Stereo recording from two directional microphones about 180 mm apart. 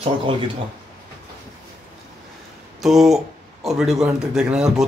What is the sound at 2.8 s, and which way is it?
Speech, centre (ahead or behind).